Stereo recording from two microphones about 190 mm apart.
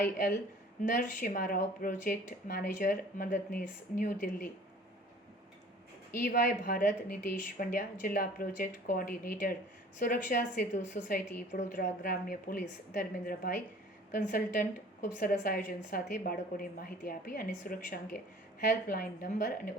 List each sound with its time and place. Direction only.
0.0 s a woman's voice: 50° left (ahead or behind)
6.1 s a woman's voice: 45° left (ahead or behind)